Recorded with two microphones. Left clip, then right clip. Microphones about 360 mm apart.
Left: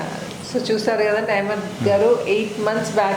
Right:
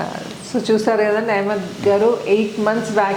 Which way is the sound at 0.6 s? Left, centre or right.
Right.